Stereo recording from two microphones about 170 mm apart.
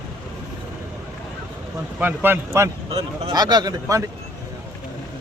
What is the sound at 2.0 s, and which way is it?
Speech, 10° right (ahead or behind).